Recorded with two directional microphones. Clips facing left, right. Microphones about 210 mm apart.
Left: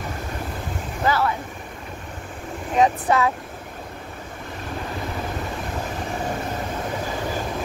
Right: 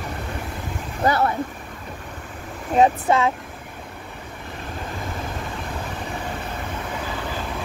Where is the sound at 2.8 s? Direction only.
25° right (ahead or behind).